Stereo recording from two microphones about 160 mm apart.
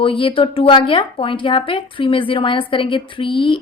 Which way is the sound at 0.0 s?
35° left (ahead or behind).